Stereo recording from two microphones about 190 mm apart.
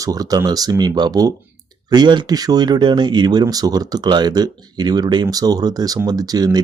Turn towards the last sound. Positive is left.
turn(degrees=-20)  # may be behind; listen again after turning